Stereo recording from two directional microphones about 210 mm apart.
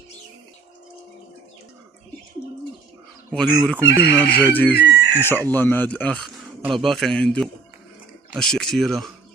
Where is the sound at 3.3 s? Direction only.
5° left (ahead or behind).